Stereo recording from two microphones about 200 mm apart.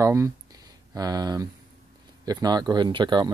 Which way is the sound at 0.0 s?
15° right (ahead or behind).